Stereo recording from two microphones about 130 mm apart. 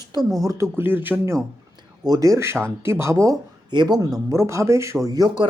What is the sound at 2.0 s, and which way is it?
Speech, 30° right (ahead or behind).